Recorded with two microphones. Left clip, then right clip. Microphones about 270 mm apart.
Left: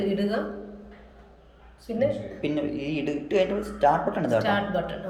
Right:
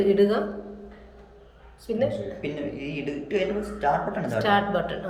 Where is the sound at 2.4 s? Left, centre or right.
Left.